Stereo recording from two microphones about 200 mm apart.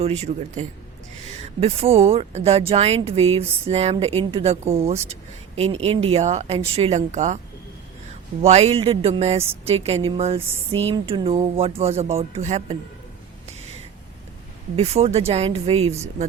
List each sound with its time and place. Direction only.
0.0 s speech: 30° right (ahead or behind)
8.4 s speech: 30° right (ahead or behind)
14.8 s speech: 30° right (ahead or behind)